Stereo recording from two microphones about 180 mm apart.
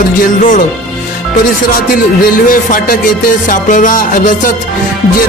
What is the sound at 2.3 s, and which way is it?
Music, 50° left (ahead or behind).